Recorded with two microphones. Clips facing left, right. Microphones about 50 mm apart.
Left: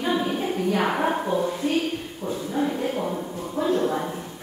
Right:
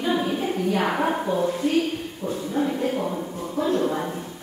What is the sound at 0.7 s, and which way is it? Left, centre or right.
Speech, centre.